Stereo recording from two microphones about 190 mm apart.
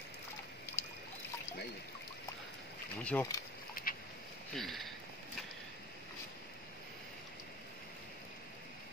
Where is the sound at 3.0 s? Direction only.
5° left (ahead or behind).